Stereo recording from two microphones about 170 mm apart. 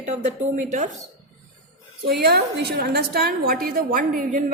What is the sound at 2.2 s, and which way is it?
A woman's voice, 70° right (ahead or behind).